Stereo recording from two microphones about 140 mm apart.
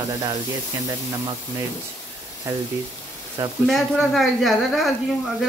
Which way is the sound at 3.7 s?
Centre (ahead or behind).